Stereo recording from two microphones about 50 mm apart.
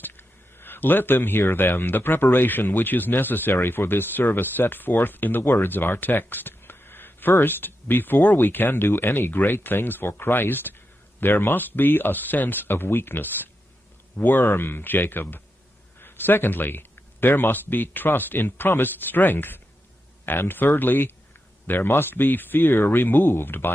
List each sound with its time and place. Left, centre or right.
0.6 s speech: left